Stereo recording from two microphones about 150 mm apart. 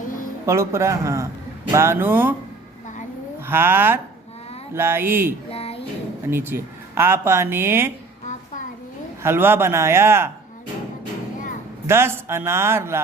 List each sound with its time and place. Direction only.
0.4 s a man's voice: 20° right (ahead or behind)
3.4 s a woman's voice: 15° right (ahead or behind)
5.5 s a sound: 40° left (ahead or behind)
6.2 s a woman's voice: 15° right (ahead or behind)
9.2 s a woman's voice: 15° right (ahead or behind)
11.9 s a woman's voice: 15° right (ahead or behind)